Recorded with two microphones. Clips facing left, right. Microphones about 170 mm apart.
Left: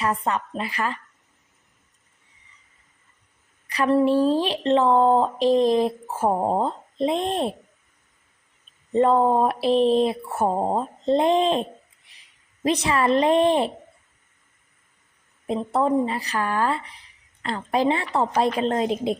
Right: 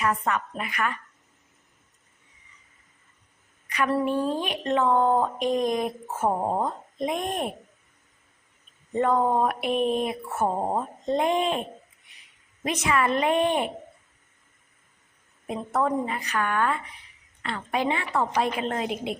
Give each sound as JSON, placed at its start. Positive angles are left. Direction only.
{"t": 0.0, "sound": "speech", "side_deg": 30}
{"t": 3.8, "sound": "speech", "side_deg": 30}
{"t": 8.9, "sound": "speech", "side_deg": 30}
{"t": 12.6, "sound": "speech", "side_deg": 35}
{"t": 15.4, "sound": "speech", "side_deg": 30}